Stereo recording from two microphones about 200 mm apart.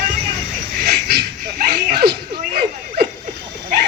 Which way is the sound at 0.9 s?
50° right (ahead or behind).